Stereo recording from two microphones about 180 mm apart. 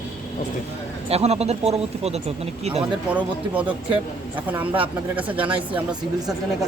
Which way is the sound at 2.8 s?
5° right (ahead or behind).